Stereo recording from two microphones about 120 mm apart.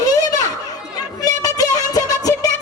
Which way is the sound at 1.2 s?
30° left (ahead or behind).